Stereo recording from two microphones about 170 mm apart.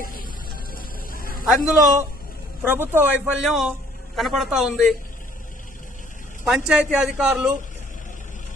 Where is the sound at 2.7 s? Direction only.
10° right (ahead or behind).